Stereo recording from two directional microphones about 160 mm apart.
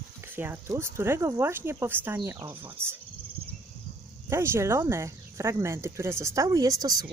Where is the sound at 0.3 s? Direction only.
15° right (ahead or behind).